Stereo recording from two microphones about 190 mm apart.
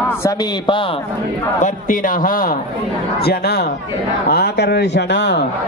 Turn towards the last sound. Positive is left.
turn(degrees=65)  # may be behind; listen again after turning